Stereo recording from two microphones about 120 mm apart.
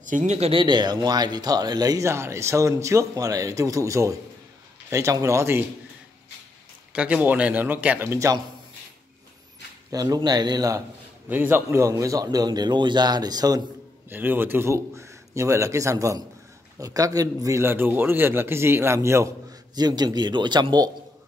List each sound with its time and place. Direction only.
0.0 s speech: 85° right
0.5 s speech: 40° right (ahead or behind); by 5.6 s 25° right (ahead or behind)
6.9 s speech: 10° right (ahead or behind)
9.8 s speech: 30° right (ahead or behind)
11.2 s speech: 15° right (ahead or behind); by 13.6 s 35° right (ahead or behind)
14.0 s speech: 15° right (ahead or behind)
19.7 s speech: 35° right (ahead or behind)